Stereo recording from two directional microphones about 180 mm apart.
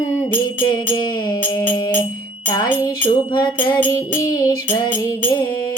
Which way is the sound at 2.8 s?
25° left (ahead or behind).